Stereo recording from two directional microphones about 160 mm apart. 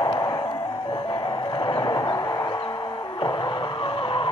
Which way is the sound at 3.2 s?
30° left (ahead or behind).